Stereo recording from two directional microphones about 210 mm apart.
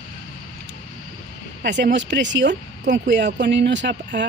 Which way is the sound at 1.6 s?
55° right (ahead or behind).